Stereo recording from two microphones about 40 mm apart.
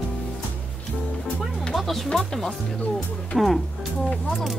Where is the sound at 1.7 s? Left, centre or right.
Centre.